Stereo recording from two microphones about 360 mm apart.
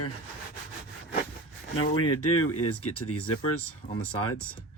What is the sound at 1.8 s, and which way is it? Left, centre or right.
Speech, left.